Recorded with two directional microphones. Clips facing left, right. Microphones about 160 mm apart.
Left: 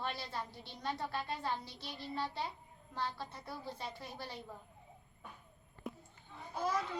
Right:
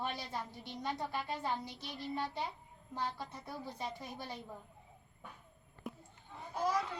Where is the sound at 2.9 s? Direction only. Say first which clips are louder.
Right 1 dB; 15° right (ahead or behind).